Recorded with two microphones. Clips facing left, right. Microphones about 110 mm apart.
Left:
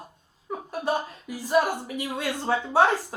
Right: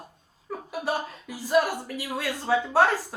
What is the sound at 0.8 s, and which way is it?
Speech, 20° left (ahead or behind).